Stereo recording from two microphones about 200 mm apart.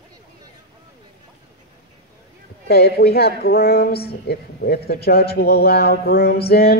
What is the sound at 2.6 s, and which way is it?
Speech, 50° left (ahead or behind).